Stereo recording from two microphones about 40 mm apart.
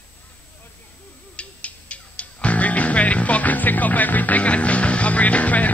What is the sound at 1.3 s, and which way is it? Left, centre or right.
Music, left.